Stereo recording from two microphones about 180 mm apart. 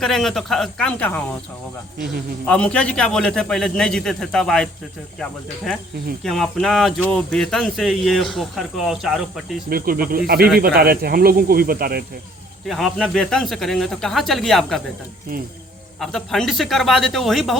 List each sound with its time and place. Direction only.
0.0 s speech: centre (ahead or behind)
2.5 s speech: 5° left (ahead or behind)
6.2 s speech: centre (ahead or behind)
9.6 s speech: 55° right (ahead or behind)
12.6 s speech: centre (ahead or behind)
16.0 s speech: centre (ahead or behind)